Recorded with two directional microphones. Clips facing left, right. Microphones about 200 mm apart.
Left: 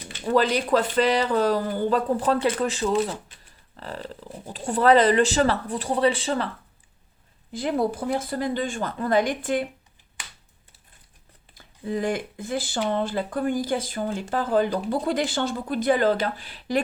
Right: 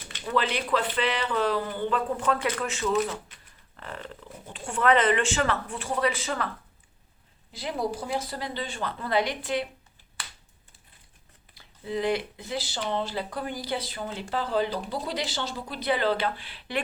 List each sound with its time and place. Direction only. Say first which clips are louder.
0.1 s speech: left 6 dB; 40° left (ahead or behind)
7.5 s speech: left 6 dB; 55° left (ahead or behind)
11.5 s speech: left 3 dB; 50° left (ahead or behind)